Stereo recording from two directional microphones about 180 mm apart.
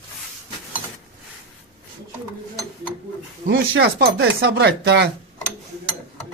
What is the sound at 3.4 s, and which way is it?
Speech, 60° right (ahead or behind).